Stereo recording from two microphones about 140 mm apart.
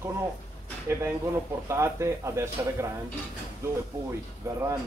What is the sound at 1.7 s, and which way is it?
Speech, 20° right (ahead or behind).